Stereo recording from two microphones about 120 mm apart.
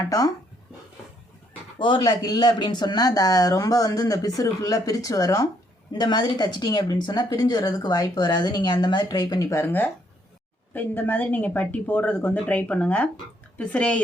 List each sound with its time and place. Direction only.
1.8 s speech: 40° left (ahead or behind); by 14.0 s 10° left (ahead or behind)